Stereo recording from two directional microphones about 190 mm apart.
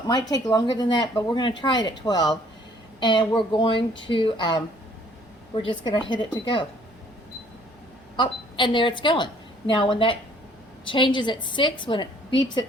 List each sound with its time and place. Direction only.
0.1 s speech: 20° left (ahead or behind)
5.6 s speech: 25° left (ahead or behind)
8.1 s a woman's voice: 25° left (ahead or behind)